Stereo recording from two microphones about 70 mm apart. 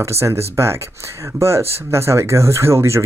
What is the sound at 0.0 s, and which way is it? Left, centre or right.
Speech, right.